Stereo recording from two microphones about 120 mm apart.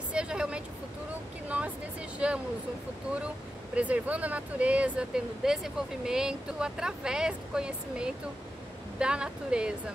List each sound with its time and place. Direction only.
0.1 s vehicle: 10° right (ahead or behind)
2.1 s a sound: 10° right (ahead or behind)
3.7 s speech: 10° right (ahead or behind)